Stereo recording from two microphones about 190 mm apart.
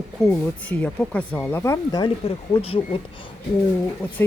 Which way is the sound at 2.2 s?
30° left (ahead or behind).